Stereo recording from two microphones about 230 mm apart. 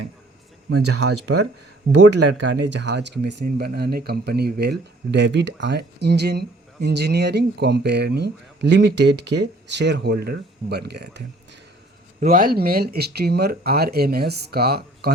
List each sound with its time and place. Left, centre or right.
0.7 s speech: right
2.0 s speech: right
12.2 s speech: right